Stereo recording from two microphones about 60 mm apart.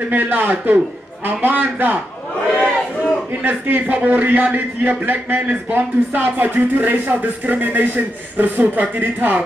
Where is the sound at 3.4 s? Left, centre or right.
Right.